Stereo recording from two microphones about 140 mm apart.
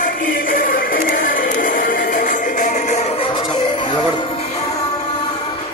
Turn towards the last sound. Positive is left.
turn(degrees=35)  # may be behind; listen again after turning